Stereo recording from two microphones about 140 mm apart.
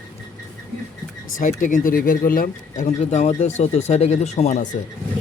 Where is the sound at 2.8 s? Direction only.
55° left (ahead or behind).